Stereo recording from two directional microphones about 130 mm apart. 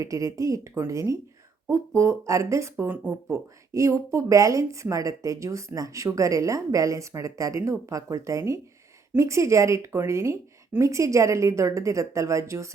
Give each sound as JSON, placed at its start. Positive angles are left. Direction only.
{"t": 0.0, "sound": "speech", "side_deg": -25}